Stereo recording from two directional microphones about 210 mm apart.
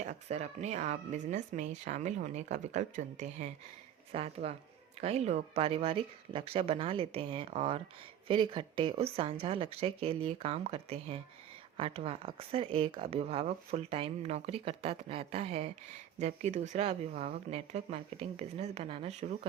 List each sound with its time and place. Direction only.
0.0 s speech: 35° right (ahead or behind)